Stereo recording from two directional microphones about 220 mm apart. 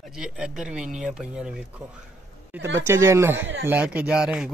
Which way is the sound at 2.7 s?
10° right (ahead or behind).